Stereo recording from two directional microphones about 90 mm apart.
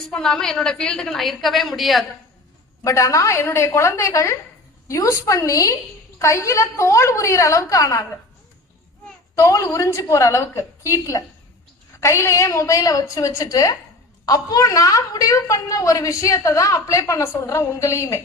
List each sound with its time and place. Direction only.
0.1 s a woman's voice: 5° left (ahead or behind)
2.8 s a woman's voice: 35° left (ahead or behind)
9.3 s a woman's voice: 35° left (ahead or behind)